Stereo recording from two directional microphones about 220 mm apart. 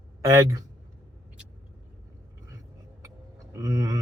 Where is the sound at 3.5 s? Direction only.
15° right (ahead or behind).